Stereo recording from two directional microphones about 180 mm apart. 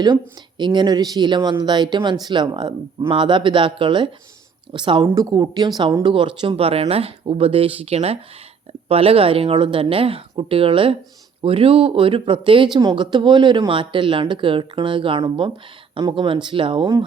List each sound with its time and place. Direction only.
0.0 s speech: 25° right (ahead or behind)